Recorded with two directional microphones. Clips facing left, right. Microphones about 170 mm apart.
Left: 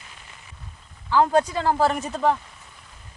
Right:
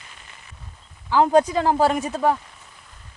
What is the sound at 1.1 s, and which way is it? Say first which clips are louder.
Speech: right 3 dB; 15° right (ahead or behind).